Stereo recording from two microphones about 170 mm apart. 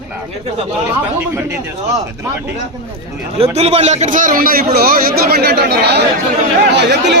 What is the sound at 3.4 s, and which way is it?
A man's voice, 40° right (ahead or behind).